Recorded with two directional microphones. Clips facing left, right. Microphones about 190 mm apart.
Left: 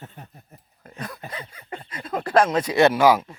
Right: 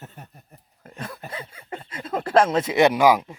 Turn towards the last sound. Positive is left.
turn(degrees=-15)  # may be behind; listen again after turning